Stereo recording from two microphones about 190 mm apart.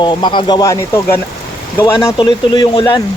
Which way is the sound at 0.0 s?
25° left (ahead or behind).